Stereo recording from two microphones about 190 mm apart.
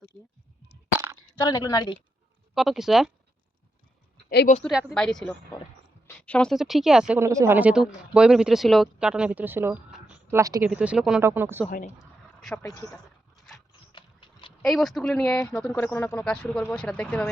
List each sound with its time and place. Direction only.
0.9 s a sound: 15° right (ahead or behind)
1.5 s a woman's voice: 20° left (ahead or behind)
2.6 s speech: centre (ahead or behind)
4.6 s speech: 5° right (ahead or behind)
7.2 s speech: 15° right (ahead or behind)
9.9 s a sound: 5° right (ahead or behind)
10.4 s speech: 15° right (ahead or behind)
10.7 s speech: 5° right (ahead or behind)
12.9 s a sound: centre (ahead or behind)
13.9 s vehicle: 25° left (ahead or behind)
14.6 s speech: centre (ahead or behind)
15.4 s speech: 15° left (ahead or behind)